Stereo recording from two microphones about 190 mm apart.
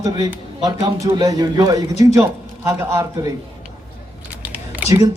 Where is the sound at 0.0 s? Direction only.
20° right (ahead or behind).